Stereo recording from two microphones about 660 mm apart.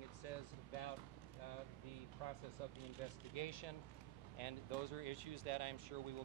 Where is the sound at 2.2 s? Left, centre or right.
Left.